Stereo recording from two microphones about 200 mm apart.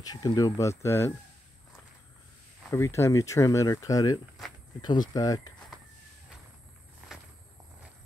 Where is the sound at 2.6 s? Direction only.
15° left (ahead or behind).